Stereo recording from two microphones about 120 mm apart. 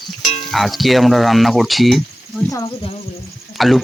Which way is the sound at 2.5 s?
30° left (ahead or behind).